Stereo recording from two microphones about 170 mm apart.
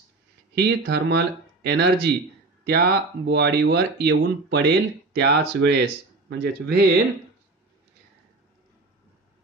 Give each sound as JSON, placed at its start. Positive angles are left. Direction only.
{"t": 0.6, "sound": "speech", "side_deg": -75}
{"t": 6.2, "sound": "speech", "side_deg": -70}